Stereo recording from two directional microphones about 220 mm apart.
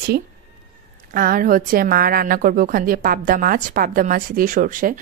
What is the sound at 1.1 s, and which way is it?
Speech, 40° right (ahead or behind).